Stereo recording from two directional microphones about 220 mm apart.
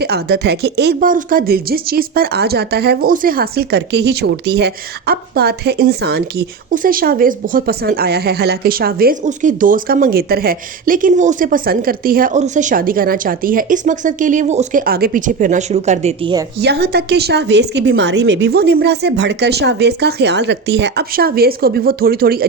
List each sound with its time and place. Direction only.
0.0 s speech: 45° right (ahead or behind); by 16.3 s 30° right (ahead or behind)
16.6 s a woman's voice: 50° right (ahead or behind)